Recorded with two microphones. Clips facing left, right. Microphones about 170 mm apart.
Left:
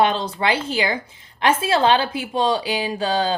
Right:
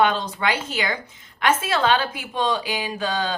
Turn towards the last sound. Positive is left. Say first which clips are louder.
# left 4 dB
turn(degrees=30)  # may be behind; listen again after turning